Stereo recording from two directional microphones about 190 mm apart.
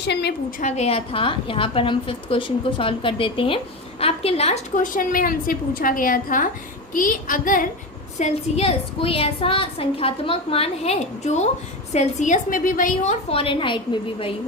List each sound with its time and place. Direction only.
0.0 s a woman's voice: 60° left (ahead or behind)
0.6 s a woman's voice: 35° left (ahead or behind)
8.2 s a woman's voice: 30° left (ahead or behind)
13.3 s a woman's voice: 30° left (ahead or behind)